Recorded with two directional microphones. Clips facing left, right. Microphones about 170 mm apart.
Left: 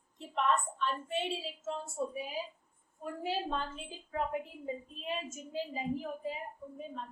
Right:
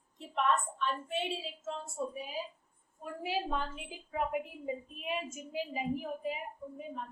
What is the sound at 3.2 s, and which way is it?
A woman's voice, 10° right (ahead or behind).